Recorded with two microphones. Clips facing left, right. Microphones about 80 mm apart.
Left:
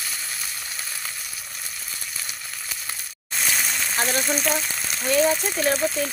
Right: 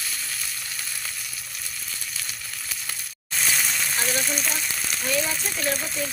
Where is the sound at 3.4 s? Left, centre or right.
Centre.